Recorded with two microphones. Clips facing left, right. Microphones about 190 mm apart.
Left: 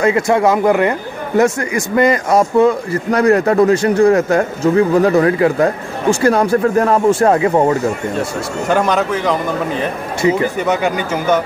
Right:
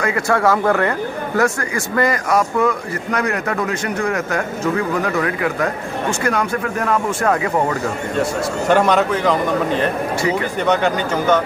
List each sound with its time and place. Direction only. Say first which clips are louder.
0.0 s speech: left 5 dB; 20° left (ahead or behind)
8.6 s a man's voice: even; centre (ahead or behind)